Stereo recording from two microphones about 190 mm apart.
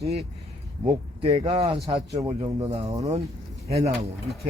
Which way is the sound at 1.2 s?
30° right (ahead or behind).